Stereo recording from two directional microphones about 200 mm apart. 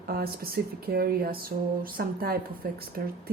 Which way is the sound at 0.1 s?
50° right (ahead or behind).